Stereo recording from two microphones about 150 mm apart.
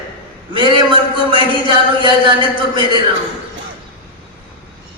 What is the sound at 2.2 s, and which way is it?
Speech, 30° right (ahead or behind).